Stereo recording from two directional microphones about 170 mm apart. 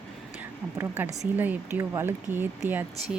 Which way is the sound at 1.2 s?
10° right (ahead or behind).